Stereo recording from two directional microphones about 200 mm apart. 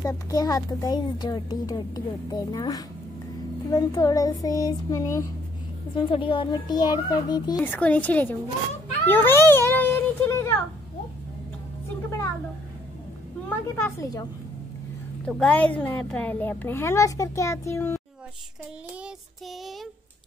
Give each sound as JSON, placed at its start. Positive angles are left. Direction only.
{"t": 0.0, "sound": "a child's voice", "side_deg": 15}
{"t": 7.6, "sound": "a child's voice", "side_deg": 10}
{"t": 13.7, "sound": "a child's voice", "side_deg": 10}
{"t": 15.2, "sound": "a child's voice", "side_deg": 5}